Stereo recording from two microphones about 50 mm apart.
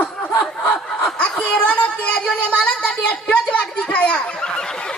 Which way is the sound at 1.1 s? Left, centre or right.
Left.